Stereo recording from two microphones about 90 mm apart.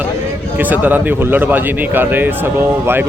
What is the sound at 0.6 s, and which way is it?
Speech, 20° right (ahead or behind).